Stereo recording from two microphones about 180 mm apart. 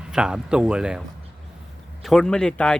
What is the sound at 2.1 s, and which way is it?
Speech, 5° left (ahead or behind).